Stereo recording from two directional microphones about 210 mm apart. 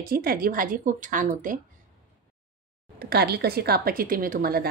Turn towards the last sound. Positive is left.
turn(degrees=-45)  # may be behind; listen again after turning